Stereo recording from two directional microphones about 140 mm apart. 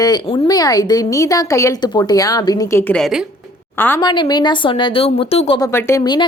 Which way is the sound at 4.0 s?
30° left (ahead or behind).